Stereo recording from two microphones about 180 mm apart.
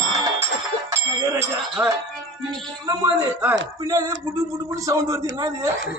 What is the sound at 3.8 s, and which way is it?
A man's voice, 20° right (ahead or behind).